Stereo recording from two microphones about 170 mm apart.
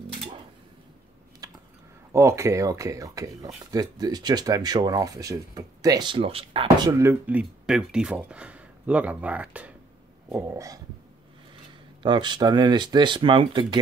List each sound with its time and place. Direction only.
1.4 s a sound: 20° right (ahead or behind)
2.1 s speech: 15° right (ahead or behind); by 6.9 s 30° right (ahead or behind)
6.9 s speech: 15° right (ahead or behind)
10.3 s speech: 20° right (ahead or behind)
12.0 s speech: 25° right (ahead or behind)